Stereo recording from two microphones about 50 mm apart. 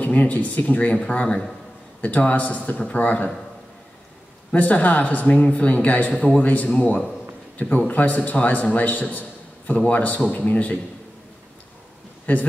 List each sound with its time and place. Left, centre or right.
0.0 s a man's voice: left
4.5 s a man's voice: left
6.1 s speech: centre
6.4 s a man's voice: left
12.3 s speech: left